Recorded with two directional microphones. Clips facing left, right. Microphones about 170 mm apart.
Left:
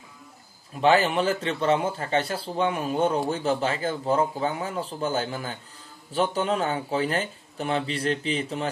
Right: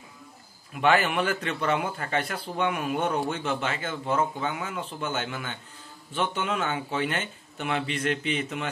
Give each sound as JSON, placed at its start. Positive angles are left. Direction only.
{"t": 0.7, "sound": "a man's voice", "side_deg": 30}